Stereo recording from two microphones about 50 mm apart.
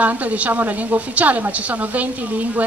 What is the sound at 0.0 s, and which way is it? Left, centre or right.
Speech, right.